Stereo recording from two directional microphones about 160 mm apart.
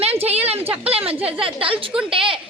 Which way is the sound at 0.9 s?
35° right (ahead or behind).